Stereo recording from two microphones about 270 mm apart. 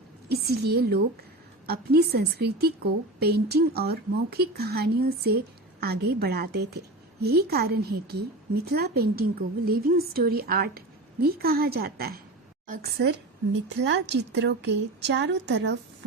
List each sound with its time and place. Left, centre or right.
0.3 s a woman's voice: right